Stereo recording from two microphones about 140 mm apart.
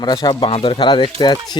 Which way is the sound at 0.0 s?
30° left (ahead or behind).